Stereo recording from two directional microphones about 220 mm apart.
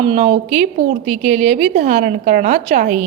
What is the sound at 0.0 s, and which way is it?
A woman's voice, 30° right (ahead or behind).